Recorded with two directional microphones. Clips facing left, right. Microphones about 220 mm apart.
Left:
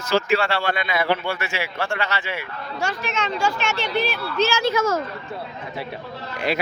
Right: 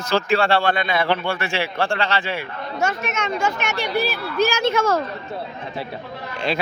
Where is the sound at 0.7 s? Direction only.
30° right (ahead or behind).